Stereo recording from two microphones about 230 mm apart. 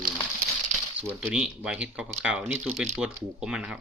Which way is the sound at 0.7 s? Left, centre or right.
Right.